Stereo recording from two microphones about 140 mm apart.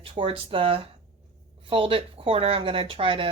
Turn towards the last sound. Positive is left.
turn(degrees=-40)  # may be behind; listen again after turning